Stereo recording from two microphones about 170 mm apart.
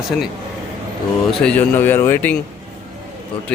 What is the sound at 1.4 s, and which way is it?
Speech, 10° left (ahead or behind).